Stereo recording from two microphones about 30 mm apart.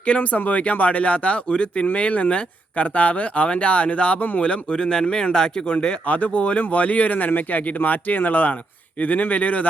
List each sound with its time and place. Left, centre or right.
0.0 s speech: left
4.8 s speech: left
5.7 s speech: left
6.1 s speech: left
9.0 s speech: left